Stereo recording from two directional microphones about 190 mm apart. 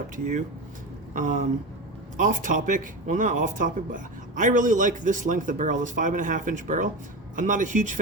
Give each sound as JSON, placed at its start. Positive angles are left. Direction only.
{"t": 1.1, "sound": "speech", "side_deg": -45}